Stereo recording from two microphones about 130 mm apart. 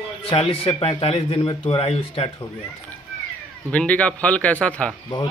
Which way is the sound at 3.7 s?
10° left (ahead or behind).